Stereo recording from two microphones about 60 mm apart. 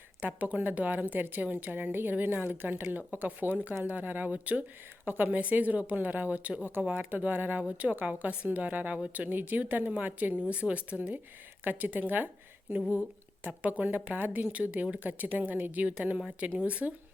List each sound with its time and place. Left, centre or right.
0.2 s speech: right
7.6 s speech: right
12.9 s a sound: right
13.5 s speech: right